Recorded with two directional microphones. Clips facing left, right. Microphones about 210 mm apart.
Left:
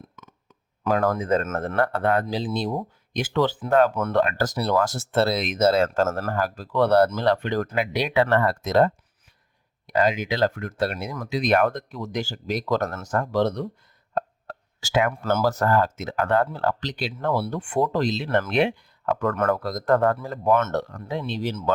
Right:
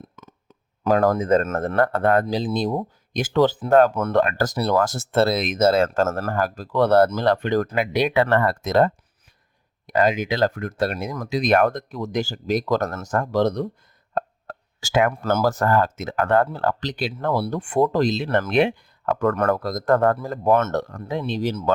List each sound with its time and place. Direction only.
0.9 s speech: 40° right (ahead or behind)